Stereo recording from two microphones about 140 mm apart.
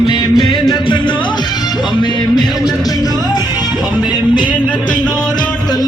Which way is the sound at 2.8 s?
25° left (ahead or behind).